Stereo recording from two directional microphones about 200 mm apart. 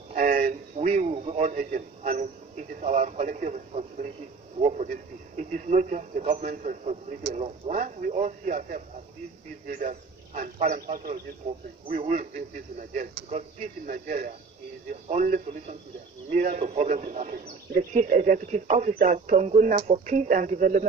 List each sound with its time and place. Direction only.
0.1 s a man's voice: 40° right (ahead or behind)